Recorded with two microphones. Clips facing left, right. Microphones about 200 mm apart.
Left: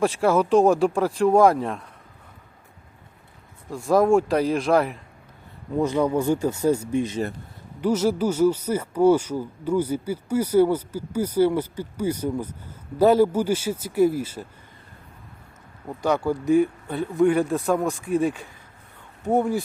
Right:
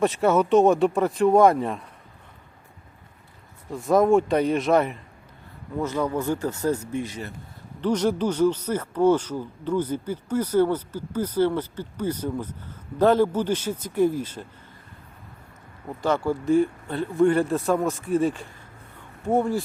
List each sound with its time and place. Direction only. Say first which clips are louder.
0.0 s speech: even; centre (ahead or behind)
3.7 s speech: even; centre (ahead or behind)
5.8 s speech: left 4 dB; 15° left (ahead or behind)
7.8 s speech: left 1 dB; 5° left (ahead or behind)
16.0 s speech: left 1 dB; 15° left (ahead or behind)
16.9 s speech: even; 5° left (ahead or behind)
18.0 s speech: even; 15° left (ahead or behind)